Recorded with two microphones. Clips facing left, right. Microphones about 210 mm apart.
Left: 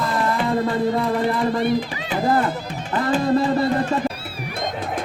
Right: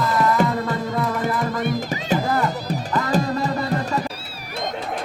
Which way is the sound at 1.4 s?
45° right (ahead or behind).